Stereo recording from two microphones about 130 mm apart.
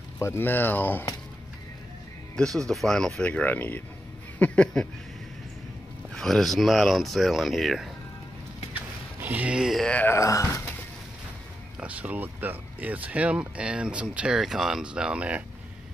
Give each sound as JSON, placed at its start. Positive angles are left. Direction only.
{"t": 0.2, "sound": "speech", "side_deg": 15}
{"t": 2.3, "sound": "speech", "side_deg": 5}
{"t": 6.1, "sound": "speech", "side_deg": 5}
{"t": 9.2, "sound": "speech", "side_deg": -10}
{"t": 10.1, "sound": "speech", "side_deg": 25}
{"t": 11.8, "sound": "speech", "side_deg": -10}